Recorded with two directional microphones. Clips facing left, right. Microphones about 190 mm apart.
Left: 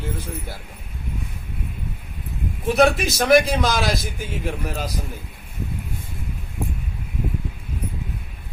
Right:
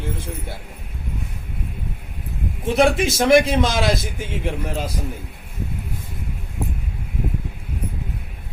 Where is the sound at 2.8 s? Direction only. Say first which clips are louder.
Right 1 dB; 25° right (ahead or behind).